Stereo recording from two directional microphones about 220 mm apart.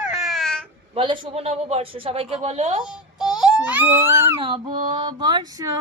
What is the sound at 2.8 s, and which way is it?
Baby cry, 5° right (ahead or behind).